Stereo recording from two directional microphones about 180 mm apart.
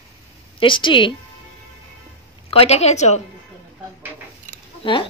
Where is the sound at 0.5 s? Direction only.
30° left (ahead or behind).